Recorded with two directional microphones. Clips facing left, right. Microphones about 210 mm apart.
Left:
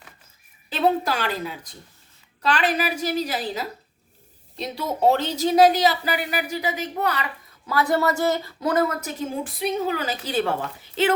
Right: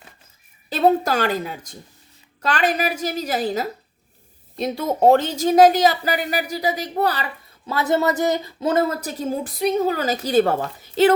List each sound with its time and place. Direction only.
0.7 s a woman's voice: 40° right (ahead or behind)
7.7 s speech: 25° right (ahead or behind); by 11.1 s 40° right (ahead or behind)